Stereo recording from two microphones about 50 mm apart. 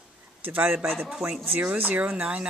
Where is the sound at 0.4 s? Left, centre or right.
Right.